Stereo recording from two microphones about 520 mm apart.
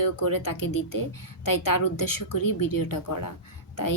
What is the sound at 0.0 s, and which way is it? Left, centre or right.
Speech, left.